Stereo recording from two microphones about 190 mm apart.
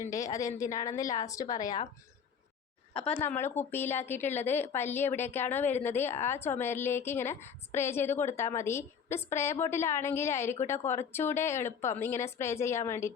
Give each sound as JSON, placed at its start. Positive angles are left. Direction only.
{"t": 0.0, "sound": "a woman's voice", "side_deg": 15}
{"t": 3.2, "sound": "a woman's voice", "side_deg": 10}